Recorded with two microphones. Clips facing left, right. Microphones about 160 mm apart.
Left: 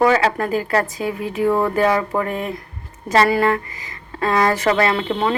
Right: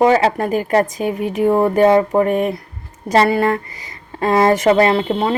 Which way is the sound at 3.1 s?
35° right (ahead or behind).